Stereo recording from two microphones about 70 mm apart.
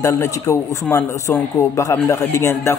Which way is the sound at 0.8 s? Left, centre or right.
Left.